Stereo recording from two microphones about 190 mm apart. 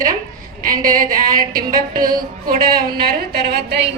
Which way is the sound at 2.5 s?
50° right (ahead or behind).